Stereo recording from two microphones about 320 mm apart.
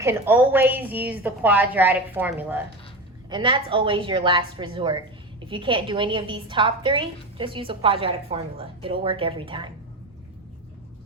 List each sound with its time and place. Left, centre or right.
0.0 s a woman's voice: centre